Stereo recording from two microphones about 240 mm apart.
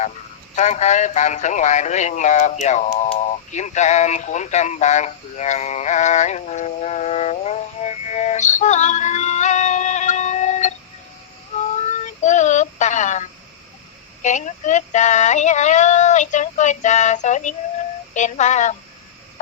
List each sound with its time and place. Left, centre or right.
0.5 s speech: left
11.8 s child singing: left
14.2 s a sound: left